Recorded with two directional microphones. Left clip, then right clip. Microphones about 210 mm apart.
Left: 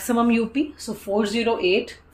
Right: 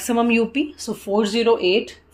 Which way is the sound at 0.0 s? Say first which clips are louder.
Right 2 dB; 30° right (ahead or behind).